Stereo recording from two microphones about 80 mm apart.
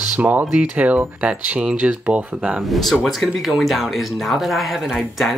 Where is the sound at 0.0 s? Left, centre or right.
Centre.